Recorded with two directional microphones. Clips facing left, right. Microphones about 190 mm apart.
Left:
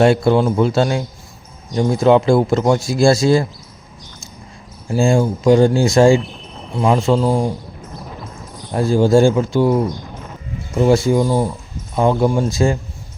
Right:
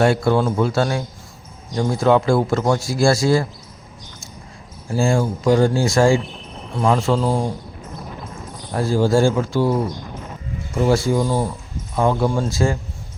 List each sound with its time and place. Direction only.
0.0 s speech: 20° left (ahead or behind)
4.9 s speech: 20° left (ahead or behind)
8.7 s speech: 20° left (ahead or behind)
10.8 s speech: 20° left (ahead or behind)